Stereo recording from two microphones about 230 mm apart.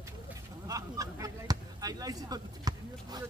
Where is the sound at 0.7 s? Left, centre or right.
Centre.